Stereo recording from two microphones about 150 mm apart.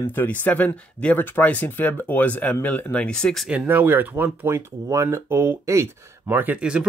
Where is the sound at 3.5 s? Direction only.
10° right (ahead or behind).